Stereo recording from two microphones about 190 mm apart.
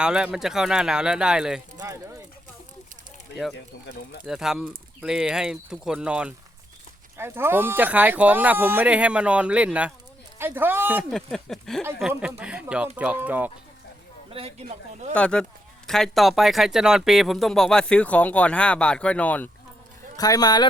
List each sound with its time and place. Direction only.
0.0 s speech: 5° right (ahead or behind)
1.8 s speech: 15° right (ahead or behind)
3.8 s speech: 60° left (ahead or behind)
4.3 s speech: 5° right (ahead or behind)
11.1 s speech: centre (ahead or behind)
14.3 s speech: 30° right (ahead or behind)
15.1 s speech: 5° left (ahead or behind)
20.1 s speech: 20° left (ahead or behind)